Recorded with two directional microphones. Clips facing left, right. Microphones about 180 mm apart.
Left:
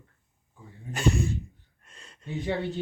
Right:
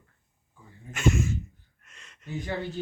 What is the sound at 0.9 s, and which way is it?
Speech, 35° left (ahead or behind).